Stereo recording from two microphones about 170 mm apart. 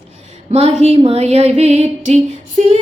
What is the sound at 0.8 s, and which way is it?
Speech, 40° right (ahead or behind).